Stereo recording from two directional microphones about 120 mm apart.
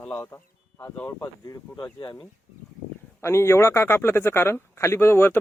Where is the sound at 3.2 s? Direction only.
20° left (ahead or behind).